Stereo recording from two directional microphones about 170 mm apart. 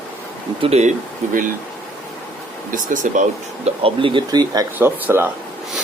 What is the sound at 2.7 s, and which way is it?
Speech, 50° right (ahead or behind).